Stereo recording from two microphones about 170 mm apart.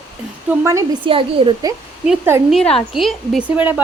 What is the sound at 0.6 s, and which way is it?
Speech, 20° right (ahead or behind).